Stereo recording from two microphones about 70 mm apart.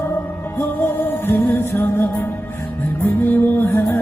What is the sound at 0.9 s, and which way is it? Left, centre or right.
Music, left.